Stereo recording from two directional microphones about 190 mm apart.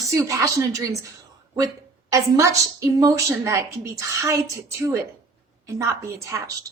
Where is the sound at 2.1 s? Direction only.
15° right (ahead or behind).